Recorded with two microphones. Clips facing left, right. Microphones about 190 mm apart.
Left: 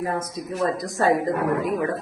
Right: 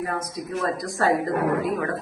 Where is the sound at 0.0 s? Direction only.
25° left (ahead or behind).